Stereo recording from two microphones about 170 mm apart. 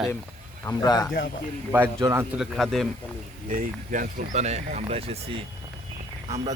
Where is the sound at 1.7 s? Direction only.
15° right (ahead or behind).